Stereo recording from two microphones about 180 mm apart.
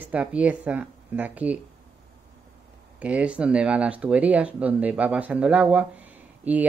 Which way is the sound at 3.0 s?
5° right (ahead or behind).